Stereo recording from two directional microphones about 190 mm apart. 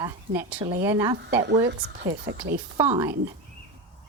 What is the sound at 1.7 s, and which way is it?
Speech, 65° right (ahead or behind).